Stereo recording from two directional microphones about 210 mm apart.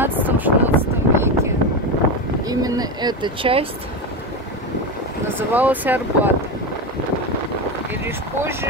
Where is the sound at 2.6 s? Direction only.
20° right (ahead or behind).